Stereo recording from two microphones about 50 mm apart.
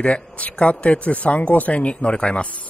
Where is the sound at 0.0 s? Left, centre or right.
Left.